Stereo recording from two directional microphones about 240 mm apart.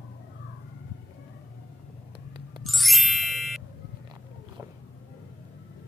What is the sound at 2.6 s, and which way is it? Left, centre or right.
Music, centre.